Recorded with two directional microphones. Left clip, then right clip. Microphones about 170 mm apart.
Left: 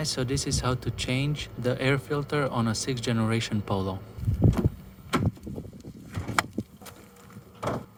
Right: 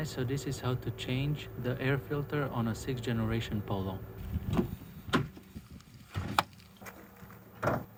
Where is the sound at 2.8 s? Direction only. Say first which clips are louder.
Left 7 dB; 75° left (ahead or behind).